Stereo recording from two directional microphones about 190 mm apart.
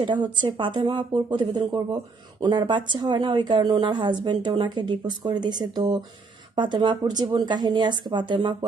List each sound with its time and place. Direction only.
0.0 s a woman's voice: 25° right (ahead or behind)